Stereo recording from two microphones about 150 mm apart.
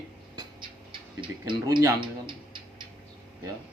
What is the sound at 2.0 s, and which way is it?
Tick-tock, 30° right (ahead or behind).